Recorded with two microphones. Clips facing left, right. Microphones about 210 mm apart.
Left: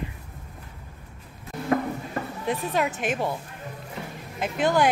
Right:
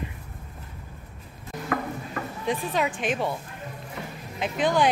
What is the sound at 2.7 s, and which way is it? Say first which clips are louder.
Speech: even; 5° left (ahead or behind).